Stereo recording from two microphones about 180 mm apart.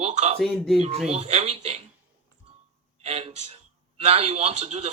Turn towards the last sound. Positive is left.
turn(degrees=-35)  # may be behind; listen again after turning